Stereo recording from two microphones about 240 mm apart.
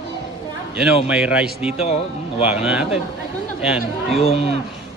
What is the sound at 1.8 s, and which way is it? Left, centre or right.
Speech, left.